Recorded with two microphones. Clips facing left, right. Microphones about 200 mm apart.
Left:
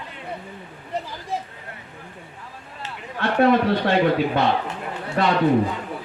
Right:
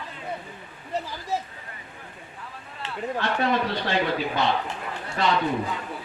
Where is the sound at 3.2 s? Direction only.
55° left (ahead or behind).